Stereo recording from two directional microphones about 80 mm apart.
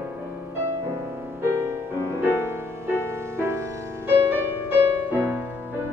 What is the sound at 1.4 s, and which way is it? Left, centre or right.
Music, right.